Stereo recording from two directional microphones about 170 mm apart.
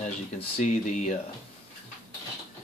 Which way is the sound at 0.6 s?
45° left (ahead or behind).